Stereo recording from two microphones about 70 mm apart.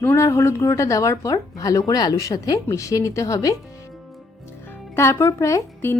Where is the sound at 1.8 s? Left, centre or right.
Left.